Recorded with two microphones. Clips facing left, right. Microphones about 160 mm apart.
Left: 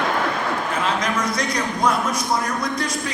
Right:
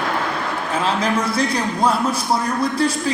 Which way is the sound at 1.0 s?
30° right (ahead or behind).